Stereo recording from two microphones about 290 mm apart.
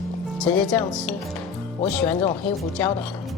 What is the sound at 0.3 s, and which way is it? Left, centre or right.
Speech, centre.